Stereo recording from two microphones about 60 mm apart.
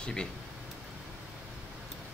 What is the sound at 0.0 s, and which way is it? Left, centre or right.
Speech, centre.